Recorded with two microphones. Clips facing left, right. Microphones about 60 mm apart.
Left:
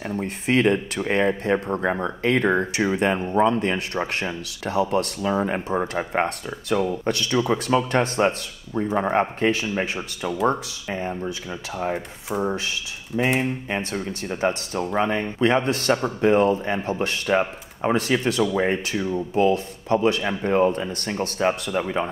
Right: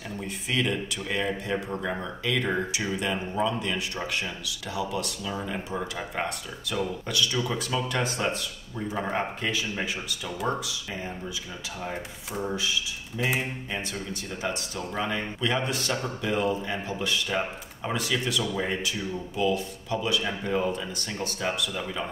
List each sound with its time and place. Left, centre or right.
0.2 s speech: left
10.4 s speech: left
11.0 s speech: left